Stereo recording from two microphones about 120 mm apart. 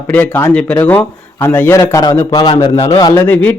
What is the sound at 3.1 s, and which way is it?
Speech, 20° left (ahead or behind).